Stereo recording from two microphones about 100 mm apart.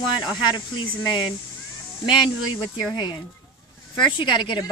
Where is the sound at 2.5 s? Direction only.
40° left (ahead or behind).